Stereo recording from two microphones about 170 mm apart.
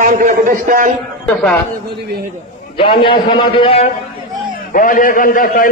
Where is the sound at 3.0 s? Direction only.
30° left (ahead or behind).